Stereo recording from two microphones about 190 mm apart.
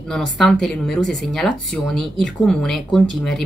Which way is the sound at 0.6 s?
5° left (ahead or behind).